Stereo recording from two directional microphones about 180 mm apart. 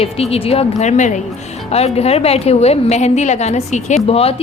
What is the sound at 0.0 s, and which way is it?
A woman's voice, 35° left (ahead or behind).